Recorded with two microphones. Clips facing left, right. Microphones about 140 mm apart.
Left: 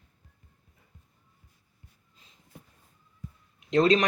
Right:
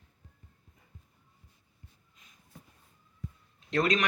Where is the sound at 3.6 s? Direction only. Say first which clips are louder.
Left 6 dB; 20° left (ahead or behind).